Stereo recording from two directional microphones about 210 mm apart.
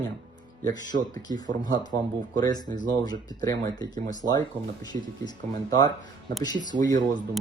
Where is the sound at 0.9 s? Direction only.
55° right (ahead or behind).